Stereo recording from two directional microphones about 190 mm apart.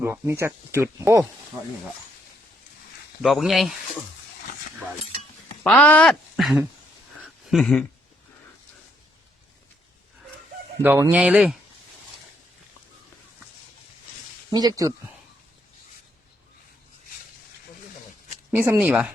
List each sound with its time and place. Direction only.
0.0 s speech: 15° right (ahead or behind)
3.2 s speech: centre (ahead or behind)
5.6 s speech: 5° left (ahead or behind)
6.3 s a sound: 5° right (ahead or behind)
7.5 s speech: centre (ahead or behind)
10.8 s speech: 10° right (ahead or behind)
14.5 s speech: 20° right (ahead or behind)
18.5 s speech: 10° right (ahead or behind)